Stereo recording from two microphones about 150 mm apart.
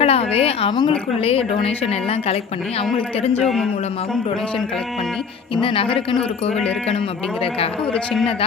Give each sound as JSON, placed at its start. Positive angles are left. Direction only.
{"t": 0.0, "sound": "a woman's voice", "side_deg": 40}
{"t": 5.6, "sound": "a woman's voice", "side_deg": 35}